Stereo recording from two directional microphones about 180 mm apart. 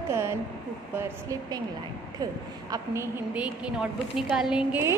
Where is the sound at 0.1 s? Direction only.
15° right (ahead or behind).